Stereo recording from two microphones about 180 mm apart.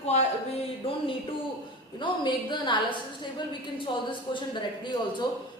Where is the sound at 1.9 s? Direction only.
25° left (ahead or behind).